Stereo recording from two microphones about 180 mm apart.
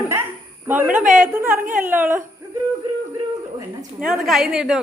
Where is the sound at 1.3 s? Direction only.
15° right (ahead or behind).